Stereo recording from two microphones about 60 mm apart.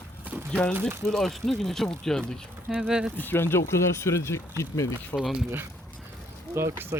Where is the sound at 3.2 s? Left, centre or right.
Left.